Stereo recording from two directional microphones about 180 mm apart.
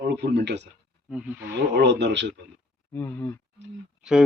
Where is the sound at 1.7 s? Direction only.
70° right (ahead or behind).